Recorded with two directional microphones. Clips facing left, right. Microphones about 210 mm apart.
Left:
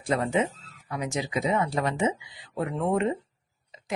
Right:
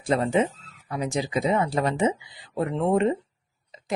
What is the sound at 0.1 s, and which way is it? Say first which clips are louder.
Speech: right 3 dB; 30° right (ahead or behind).